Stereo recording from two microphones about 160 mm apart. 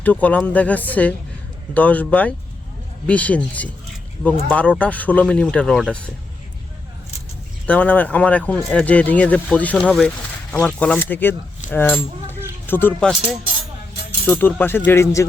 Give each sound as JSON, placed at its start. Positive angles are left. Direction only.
{"t": 0.0, "sound": "speech", "side_deg": 10}
{"t": 7.7, "sound": "speech", "side_deg": 10}
{"t": 14.3, "sound": "speech", "side_deg": 10}